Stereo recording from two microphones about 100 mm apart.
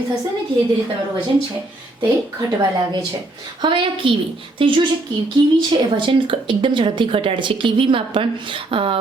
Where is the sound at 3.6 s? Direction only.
55° right (ahead or behind).